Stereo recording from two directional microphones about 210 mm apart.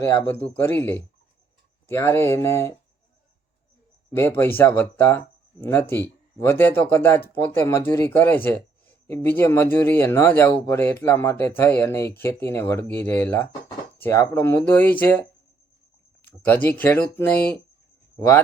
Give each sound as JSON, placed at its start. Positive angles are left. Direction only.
{"t": 0.2, "sound": "speech", "side_deg": 10}
{"t": 4.1, "sound": "speech", "side_deg": 10}